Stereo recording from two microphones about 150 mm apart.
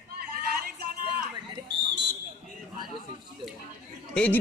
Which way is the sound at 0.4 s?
90° right.